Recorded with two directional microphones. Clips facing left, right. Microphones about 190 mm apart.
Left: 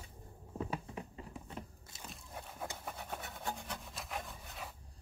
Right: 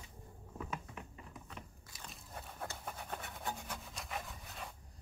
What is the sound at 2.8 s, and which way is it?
Wood, 5° left (ahead or behind).